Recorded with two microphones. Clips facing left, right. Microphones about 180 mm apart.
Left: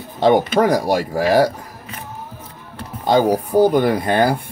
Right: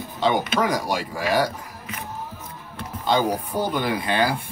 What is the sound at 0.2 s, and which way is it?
Speech, 50° left (ahead or behind).